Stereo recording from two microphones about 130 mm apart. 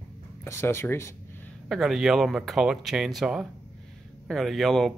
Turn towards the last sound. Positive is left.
turn(degrees=0)  # may be behind; listen again after turning